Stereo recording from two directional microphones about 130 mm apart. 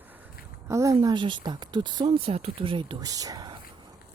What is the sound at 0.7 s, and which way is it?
Speech, 25° right (ahead or behind).